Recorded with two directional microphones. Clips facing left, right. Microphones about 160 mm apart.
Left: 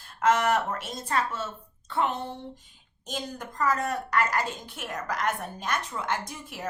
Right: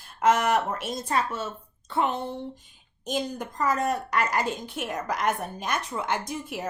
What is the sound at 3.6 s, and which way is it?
A woman's voice, 20° right (ahead or behind).